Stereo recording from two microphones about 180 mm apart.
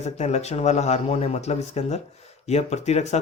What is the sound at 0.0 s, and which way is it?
Speech, 40° left (ahead or behind).